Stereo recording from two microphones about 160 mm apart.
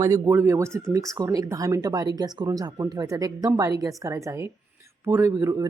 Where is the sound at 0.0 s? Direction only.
15° right (ahead or behind).